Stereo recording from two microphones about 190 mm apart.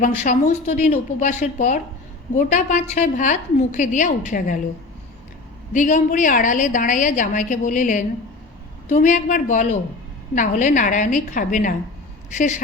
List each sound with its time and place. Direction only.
0.2 s a woman's voice: 40° left (ahead or behind)
5.7 s a woman's voice: 40° left (ahead or behind)